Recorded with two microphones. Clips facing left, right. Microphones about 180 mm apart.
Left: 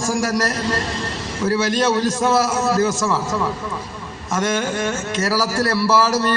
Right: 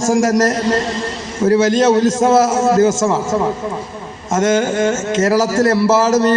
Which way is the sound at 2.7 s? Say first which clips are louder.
Right 6 dB; 25° right (ahead or behind).